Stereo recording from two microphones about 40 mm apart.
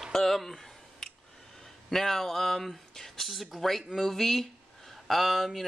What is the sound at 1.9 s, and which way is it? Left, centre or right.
Speech, centre.